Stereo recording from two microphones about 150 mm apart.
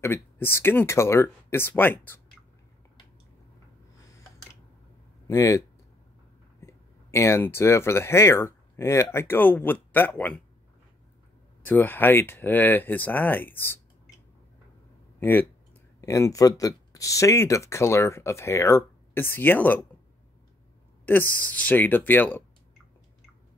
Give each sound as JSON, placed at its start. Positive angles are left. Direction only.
{"t": 0.0, "sound": "speech", "side_deg": 15}
{"t": 5.2, "sound": "speech", "side_deg": 20}
{"t": 11.6, "sound": "speech", "side_deg": 10}
{"t": 15.1, "sound": "speech", "side_deg": 15}
{"t": 21.0, "sound": "speech", "side_deg": 10}